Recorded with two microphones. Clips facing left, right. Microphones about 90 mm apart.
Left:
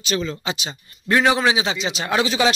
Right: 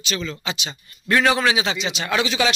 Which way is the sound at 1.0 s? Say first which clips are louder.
Left 1 dB; 15° left (ahead or behind).